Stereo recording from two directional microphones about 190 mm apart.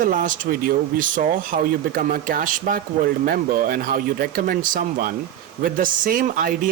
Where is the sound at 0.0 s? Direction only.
45° right (ahead or behind).